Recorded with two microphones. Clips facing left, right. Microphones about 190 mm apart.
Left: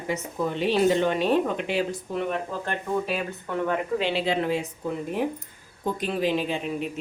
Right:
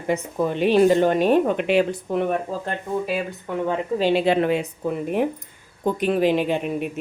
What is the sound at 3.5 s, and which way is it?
Speech, 15° right (ahead or behind).